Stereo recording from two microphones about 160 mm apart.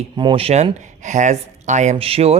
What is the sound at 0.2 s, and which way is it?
Speech, 35° right (ahead or behind).